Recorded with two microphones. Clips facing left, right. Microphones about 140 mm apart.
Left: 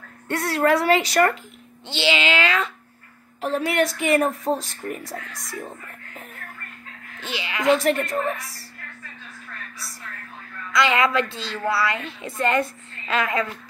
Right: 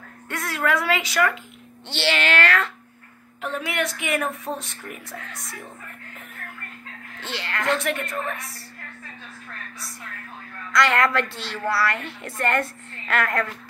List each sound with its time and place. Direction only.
0.3 s speech: 35° left (ahead or behind)
2.0 s speech: 15° left (ahead or behind)
3.3 s speech: 35° left (ahead or behind)
7.2 s speech: 10° left (ahead or behind)
7.8 s speech: 35° left (ahead or behind)
10.7 s a woman's voice: 5° left (ahead or behind)